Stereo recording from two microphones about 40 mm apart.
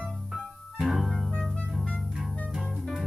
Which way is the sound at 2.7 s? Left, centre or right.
Centre.